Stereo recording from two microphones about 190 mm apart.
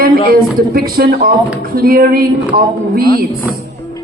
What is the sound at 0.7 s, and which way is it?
A woman's voice, 50° right (ahead or behind).